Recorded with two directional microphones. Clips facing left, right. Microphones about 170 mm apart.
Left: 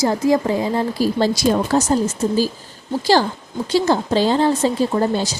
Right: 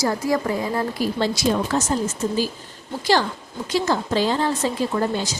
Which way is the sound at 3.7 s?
30° left (ahead or behind).